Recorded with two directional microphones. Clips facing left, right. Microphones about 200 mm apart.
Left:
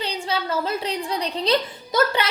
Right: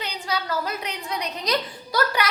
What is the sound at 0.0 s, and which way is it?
A woman's voice, 25° left (ahead or behind).